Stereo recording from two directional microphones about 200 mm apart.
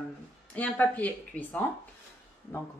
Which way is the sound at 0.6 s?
5° left (ahead or behind).